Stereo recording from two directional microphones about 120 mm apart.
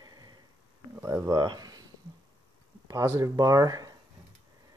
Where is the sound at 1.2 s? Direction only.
35° right (ahead or behind).